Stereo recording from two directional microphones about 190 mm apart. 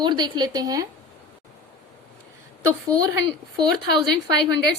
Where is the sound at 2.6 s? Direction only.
15° right (ahead or behind).